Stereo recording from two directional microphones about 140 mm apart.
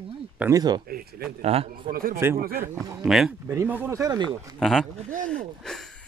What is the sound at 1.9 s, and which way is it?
Speech, 90° right.